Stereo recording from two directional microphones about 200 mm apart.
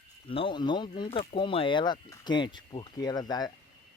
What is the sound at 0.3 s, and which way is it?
Speech, 25° left (ahead or behind).